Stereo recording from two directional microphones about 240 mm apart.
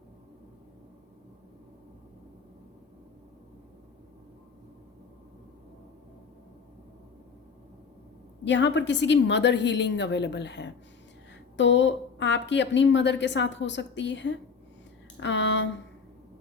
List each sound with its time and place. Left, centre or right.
8.4 s a woman's voice: left